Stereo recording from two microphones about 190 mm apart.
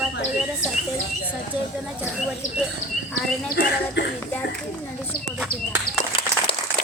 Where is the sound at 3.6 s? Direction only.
60° left (ahead or behind).